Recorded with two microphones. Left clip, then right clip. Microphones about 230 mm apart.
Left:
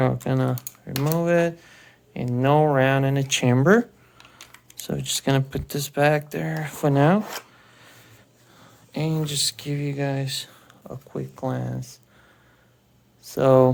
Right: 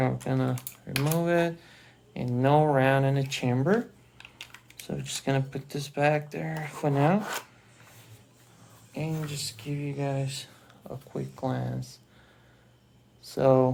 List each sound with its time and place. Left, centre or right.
0.0 s speech: left
4.9 s speech: left
7.2 s rub: centre
8.9 s speech: left
13.3 s speech: left